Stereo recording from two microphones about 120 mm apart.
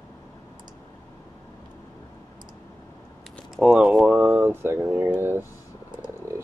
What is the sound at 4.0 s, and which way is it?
Speech, 15° right (ahead or behind).